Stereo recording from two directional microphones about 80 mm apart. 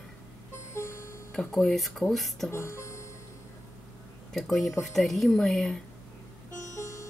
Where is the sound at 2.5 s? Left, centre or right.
Left.